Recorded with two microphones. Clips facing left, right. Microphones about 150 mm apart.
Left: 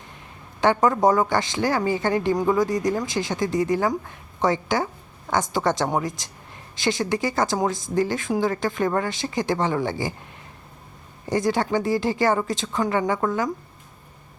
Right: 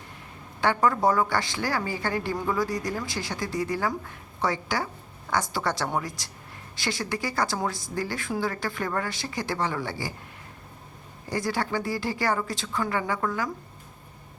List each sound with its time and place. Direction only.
0.6 s speech: 20° left (ahead or behind)
11.3 s speech: 20° left (ahead or behind)